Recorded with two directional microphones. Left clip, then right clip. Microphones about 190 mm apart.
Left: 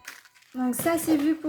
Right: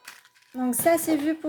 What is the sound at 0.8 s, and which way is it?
Speech, 40° right (ahead or behind).